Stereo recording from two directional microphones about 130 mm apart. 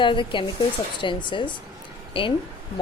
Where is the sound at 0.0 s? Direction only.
40° left (ahead or behind).